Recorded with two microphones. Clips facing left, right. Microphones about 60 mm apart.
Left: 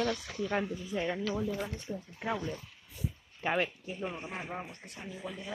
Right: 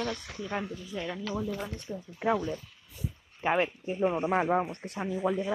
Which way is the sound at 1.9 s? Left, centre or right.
Centre.